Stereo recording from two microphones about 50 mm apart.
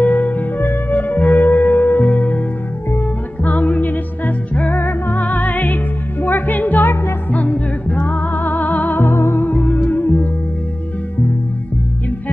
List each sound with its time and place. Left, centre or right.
0.0 s music: left
0.6 s music: left
3.4 s music: left
4.7 s music: left
5.3 s music: left
7.3 s music: left
9.0 s music: left
9.5 s music: left